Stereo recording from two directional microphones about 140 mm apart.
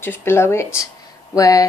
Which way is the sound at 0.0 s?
15° left (ahead or behind).